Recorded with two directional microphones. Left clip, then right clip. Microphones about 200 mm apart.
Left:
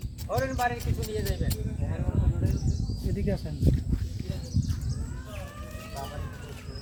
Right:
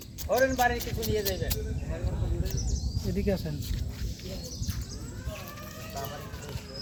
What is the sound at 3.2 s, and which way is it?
Speech, 15° right (ahead or behind).